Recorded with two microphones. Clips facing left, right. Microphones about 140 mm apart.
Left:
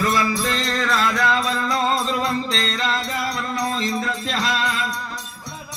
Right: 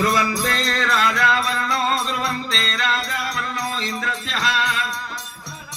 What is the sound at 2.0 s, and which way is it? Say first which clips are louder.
Music: left 3 dB; 40° left (ahead or behind).